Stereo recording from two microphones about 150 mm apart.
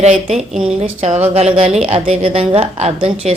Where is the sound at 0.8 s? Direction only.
45° right (ahead or behind).